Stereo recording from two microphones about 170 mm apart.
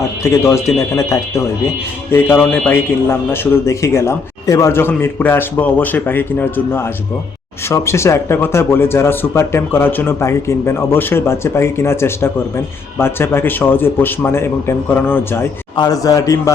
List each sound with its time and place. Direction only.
0.2 s speech: 15° left (ahead or behind)
15.7 s a man's voice: 25° left (ahead or behind)